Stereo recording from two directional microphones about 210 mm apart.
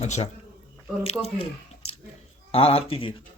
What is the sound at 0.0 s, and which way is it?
Speech, 30° left (ahead or behind).